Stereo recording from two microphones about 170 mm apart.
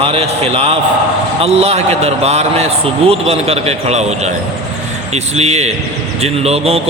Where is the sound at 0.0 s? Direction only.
35° right (ahead or behind).